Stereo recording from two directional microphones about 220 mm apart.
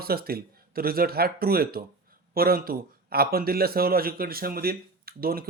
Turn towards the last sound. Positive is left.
turn(degrees=-40)  # may be behind; listen again after turning